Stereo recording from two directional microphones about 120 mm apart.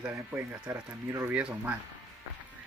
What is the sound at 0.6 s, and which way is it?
Speech, 20° right (ahead or behind).